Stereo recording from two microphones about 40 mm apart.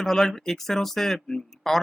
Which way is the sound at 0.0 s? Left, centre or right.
Centre.